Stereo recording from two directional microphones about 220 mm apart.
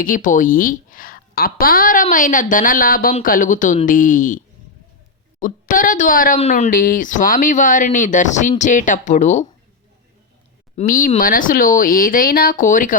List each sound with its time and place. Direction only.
0.0 s speech: 40° left (ahead or behind)
10.8 s speech: 40° left (ahead or behind)